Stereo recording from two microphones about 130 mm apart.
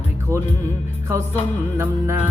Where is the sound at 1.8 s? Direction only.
20° right (ahead or behind).